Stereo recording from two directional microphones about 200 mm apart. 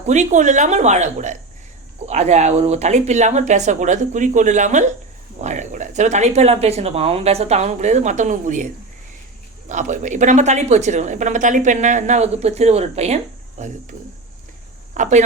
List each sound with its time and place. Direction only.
0.1 s a woman's voice: 35° right (ahead or behind)
9.6 s a woman's voice: 40° right (ahead or behind)
14.9 s speech: 40° right (ahead or behind)